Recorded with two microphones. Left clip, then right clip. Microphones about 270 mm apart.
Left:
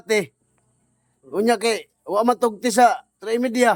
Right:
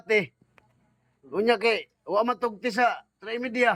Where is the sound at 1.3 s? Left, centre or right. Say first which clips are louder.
Left 3 dB; centre.